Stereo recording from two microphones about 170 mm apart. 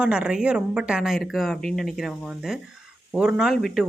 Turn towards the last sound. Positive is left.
turn(degrees=0)  # may be behind; listen again after turning